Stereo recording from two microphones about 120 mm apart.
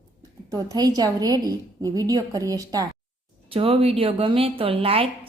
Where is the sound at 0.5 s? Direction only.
35° right (ahead or behind).